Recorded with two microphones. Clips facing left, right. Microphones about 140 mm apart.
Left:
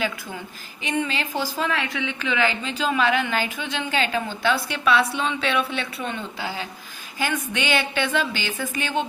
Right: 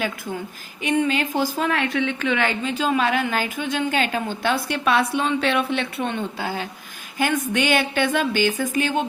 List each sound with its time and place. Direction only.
0.8 s a woman's voice: 50° right (ahead or behind)